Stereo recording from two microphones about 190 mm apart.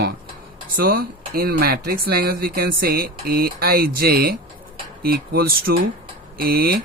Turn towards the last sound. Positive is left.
turn(degrees=-55)  # may be behind; listen again after turning